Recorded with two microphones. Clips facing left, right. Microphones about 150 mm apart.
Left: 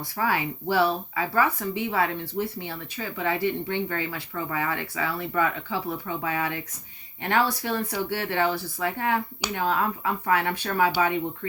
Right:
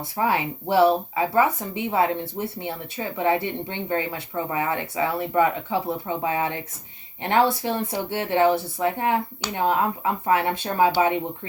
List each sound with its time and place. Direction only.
0.0 s speech: 25° right (ahead or behind)